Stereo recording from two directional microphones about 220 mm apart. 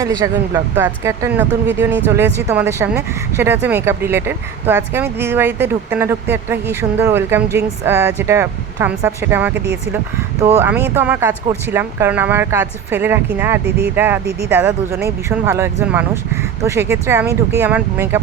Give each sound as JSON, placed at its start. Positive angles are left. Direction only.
{"t": 0.0, "sound": "speech", "side_deg": -15}
{"t": 13.7, "sound": "speech", "side_deg": -45}
{"t": 13.9, "sound": "speech", "side_deg": -10}